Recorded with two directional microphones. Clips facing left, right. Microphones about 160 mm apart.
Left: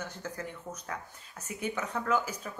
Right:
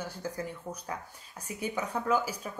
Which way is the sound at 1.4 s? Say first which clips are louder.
Right 1 dB; 10° right (ahead or behind).